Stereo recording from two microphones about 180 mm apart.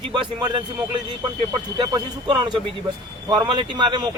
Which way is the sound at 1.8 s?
25° right (ahead or behind).